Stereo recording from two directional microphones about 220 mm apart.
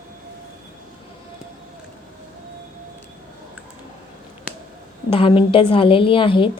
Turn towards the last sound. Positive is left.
turn(degrees=25)  # may be behind; listen again after turning